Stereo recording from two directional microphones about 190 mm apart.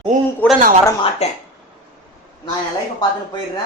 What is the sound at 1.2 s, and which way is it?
Speech, 35° left (ahead or behind).